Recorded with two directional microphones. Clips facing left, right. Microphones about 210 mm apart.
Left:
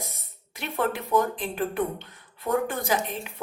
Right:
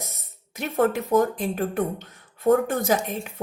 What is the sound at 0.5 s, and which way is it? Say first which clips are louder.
Speech: right 6 dB; 45° right (ahead or behind).